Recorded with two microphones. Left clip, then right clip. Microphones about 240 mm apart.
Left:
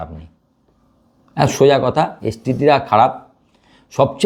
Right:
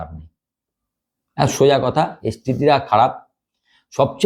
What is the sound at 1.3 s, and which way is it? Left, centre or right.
Speech, right.